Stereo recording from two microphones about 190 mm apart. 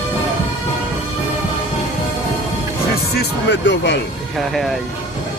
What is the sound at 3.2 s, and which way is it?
Music, 70° left (ahead or behind).